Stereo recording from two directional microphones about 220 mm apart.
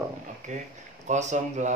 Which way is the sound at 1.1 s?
35° right (ahead or behind).